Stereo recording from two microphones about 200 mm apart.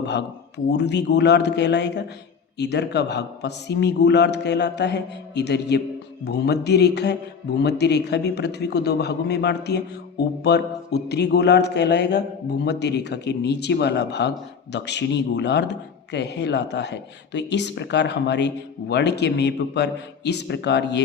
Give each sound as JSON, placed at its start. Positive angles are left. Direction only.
{"t": 0.0, "sound": "speech", "side_deg": 60}